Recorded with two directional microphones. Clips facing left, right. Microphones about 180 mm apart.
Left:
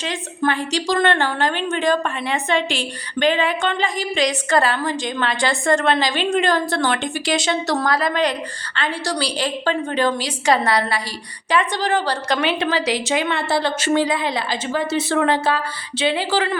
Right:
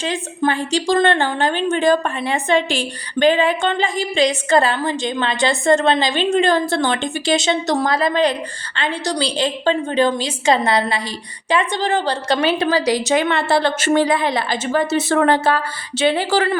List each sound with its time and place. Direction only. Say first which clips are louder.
0.0 s a woman's voice: right 2 dB; 30° right (ahead or behind)
13.2 s a woman's voice: right 3 dB; 55° right (ahead or behind)